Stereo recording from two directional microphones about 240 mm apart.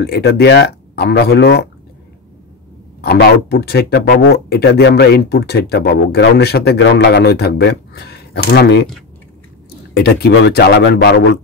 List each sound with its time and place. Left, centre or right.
0.0 s speech: left
3.0 s speech: left
9.9 s speech: left